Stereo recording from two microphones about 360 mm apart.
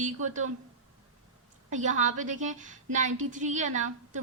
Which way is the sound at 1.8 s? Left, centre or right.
Centre.